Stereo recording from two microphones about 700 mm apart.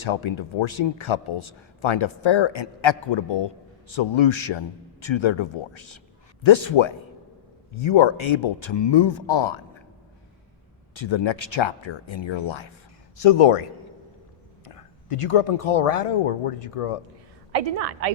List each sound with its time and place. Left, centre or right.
0.0 s speech: left
10.9 s speech: left
13.1 s speech: left
14.7 s speech: left
17.5 s a woman's voice: right